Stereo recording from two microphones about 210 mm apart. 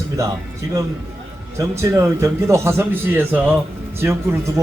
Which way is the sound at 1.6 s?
15° right (ahead or behind).